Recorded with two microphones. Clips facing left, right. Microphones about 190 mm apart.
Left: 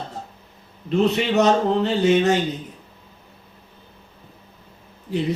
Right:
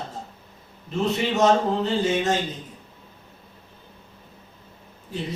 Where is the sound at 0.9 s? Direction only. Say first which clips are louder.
Left 5 dB; 70° left (ahead or behind).